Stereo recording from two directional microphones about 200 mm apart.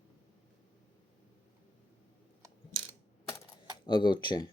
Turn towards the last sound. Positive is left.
turn(degrees=20)  # may be behind; listen again after turning